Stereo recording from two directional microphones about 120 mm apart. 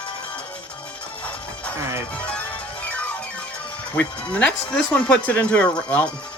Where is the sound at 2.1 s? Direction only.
10° left (ahead or behind).